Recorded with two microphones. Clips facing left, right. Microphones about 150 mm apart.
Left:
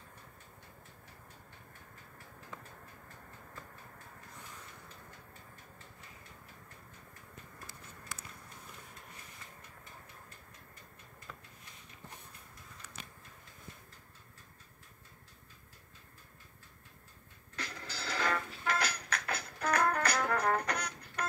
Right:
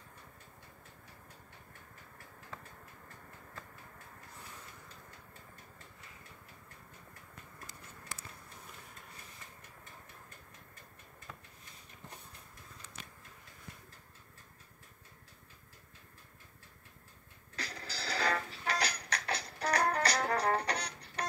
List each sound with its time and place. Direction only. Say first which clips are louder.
17.6 s music: even; 35° right (ahead or behind)